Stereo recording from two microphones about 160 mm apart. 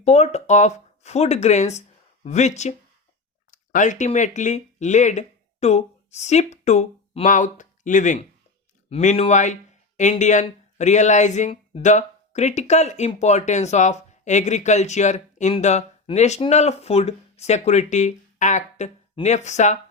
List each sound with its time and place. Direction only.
0.0 s speech: 45° left (ahead or behind)
7.3 s speech: 55° left (ahead or behind)